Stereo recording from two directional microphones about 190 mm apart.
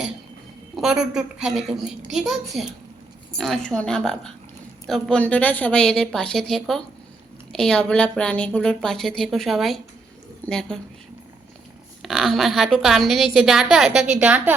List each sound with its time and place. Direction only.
0.8 s a woman's voice: 5° right (ahead or behind)
12.0 s a woman's voice: centre (ahead or behind)